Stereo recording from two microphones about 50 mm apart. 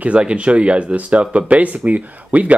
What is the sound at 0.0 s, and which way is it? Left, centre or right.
Speech, right.